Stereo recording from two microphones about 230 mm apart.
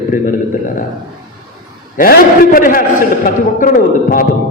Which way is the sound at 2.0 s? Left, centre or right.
Left.